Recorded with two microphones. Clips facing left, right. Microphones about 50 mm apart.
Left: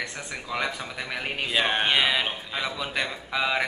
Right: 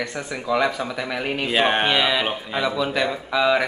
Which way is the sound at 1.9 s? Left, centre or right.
Centre.